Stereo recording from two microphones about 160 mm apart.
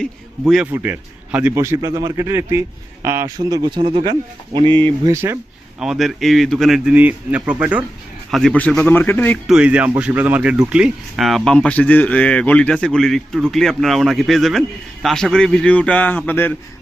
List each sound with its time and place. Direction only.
0.0 s a man's voice: centre (ahead or behind)
0.7 s speech: 10° right (ahead or behind); by 5.1 s 30° right (ahead or behind)
5.1 s speech: 15° right (ahead or behind)
5.8 s a man's voice: centre (ahead or behind)
9.5 s a man's voice: 5° right (ahead or behind); by 16.5 s 10° left (ahead or behind)